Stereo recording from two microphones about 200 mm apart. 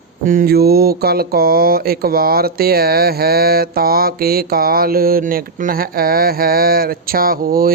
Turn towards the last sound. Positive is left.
turn(degrees=-45)  # may be behind; listen again after turning